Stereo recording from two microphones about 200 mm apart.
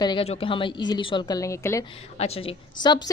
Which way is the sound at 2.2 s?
30° left (ahead or behind).